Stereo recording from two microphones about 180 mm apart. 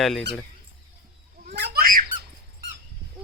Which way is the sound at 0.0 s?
Centre (ahead or behind).